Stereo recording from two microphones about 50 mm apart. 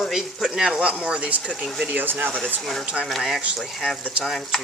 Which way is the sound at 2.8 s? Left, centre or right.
Centre.